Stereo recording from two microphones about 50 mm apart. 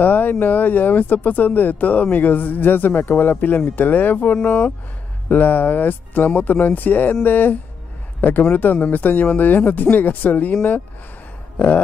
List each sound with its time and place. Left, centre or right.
0.0 s speech: left
4.4 s speech: left
5.3 s a man's voice: left